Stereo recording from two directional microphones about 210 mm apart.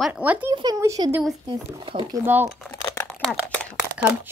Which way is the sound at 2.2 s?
10° right (ahead or behind).